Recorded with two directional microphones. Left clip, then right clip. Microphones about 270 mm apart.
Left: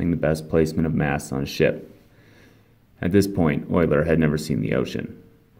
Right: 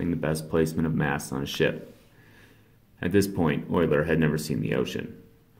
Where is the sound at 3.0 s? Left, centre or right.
Left.